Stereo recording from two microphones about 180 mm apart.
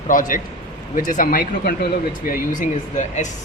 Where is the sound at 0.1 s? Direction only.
50° left (ahead or behind).